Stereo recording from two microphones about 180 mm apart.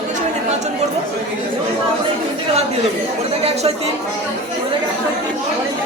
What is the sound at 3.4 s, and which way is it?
Speech, 35° right (ahead or behind).